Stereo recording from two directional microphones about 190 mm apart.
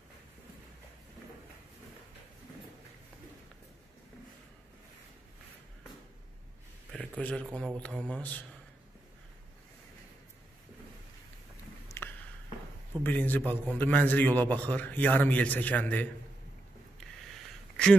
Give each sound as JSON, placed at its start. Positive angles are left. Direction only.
{"t": 6.9, "sound": "a man's voice", "side_deg": 5}
{"t": 11.9, "sound": "a sound", "side_deg": 15}
{"t": 13.0, "sound": "a man's voice", "side_deg": 10}